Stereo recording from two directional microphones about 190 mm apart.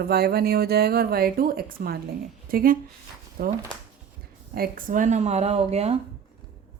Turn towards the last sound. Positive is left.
turn(degrees=-35)  # may be behind; listen again after turning